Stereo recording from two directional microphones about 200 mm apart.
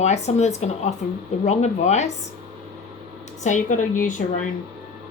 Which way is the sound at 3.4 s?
35° left (ahead or behind).